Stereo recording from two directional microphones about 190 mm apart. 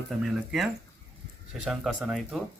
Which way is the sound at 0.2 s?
Centre (ahead or behind).